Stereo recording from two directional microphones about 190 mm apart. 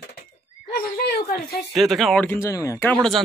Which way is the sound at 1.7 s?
Centre (ahead or behind).